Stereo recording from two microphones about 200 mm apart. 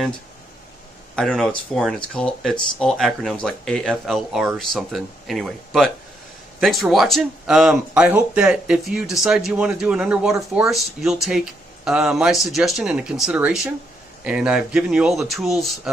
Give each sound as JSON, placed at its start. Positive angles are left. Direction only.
{"t": 1.1, "sound": "speech", "side_deg": 5}